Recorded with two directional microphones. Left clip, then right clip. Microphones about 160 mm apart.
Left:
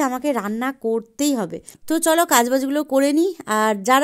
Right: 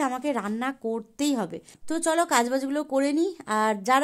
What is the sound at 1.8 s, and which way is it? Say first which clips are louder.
A woman's voice: left 7 dB; 40° left (ahead or behind).